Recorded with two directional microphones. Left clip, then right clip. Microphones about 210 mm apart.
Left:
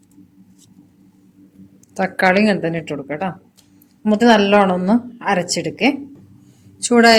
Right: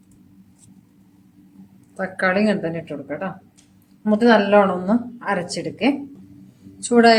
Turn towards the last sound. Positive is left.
turn(degrees=35)  # may be behind; listen again after turning